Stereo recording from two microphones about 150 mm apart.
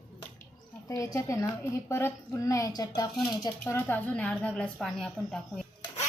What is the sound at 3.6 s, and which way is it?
A woman's voice, 10° left (ahead or behind).